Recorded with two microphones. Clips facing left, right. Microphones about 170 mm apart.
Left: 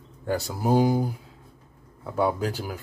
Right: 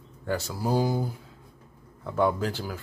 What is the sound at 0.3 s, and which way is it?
Speech, 15° left (ahead or behind).